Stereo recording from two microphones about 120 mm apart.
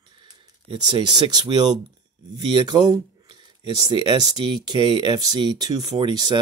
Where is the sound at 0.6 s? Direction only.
45° right (ahead or behind).